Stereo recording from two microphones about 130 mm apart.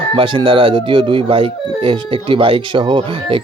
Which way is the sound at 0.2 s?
40° right (ahead or behind).